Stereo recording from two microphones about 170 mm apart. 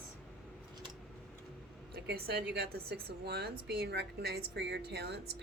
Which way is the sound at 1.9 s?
65° right (ahead or behind).